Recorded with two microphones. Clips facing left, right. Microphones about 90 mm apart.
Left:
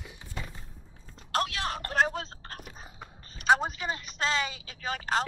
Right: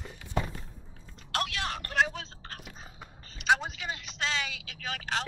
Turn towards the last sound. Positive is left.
turn(degrees=40)  # may be behind; listen again after turning